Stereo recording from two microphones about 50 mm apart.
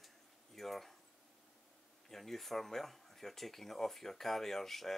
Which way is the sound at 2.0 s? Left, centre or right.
Centre.